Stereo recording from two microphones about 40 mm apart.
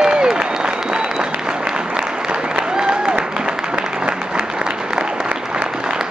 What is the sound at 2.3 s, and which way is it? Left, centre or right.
Applause, right.